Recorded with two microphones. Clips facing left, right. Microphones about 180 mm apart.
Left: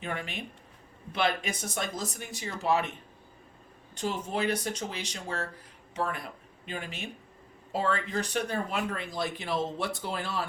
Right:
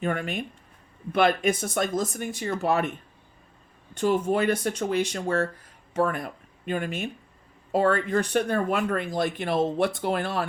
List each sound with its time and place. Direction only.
0.0 s speech: 50° right (ahead or behind)
3.9 s speech: 55° right (ahead or behind)